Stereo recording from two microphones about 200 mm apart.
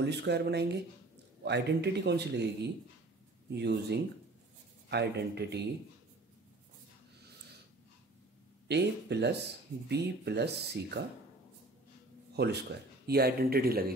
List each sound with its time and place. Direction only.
0.0 s a man's voice: 55° right (ahead or behind)
8.6 s a man's voice: 55° right (ahead or behind)
12.4 s speech: 55° right (ahead or behind)